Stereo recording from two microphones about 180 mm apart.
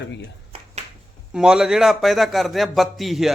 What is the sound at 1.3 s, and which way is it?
Speech, 5° right (ahead or behind).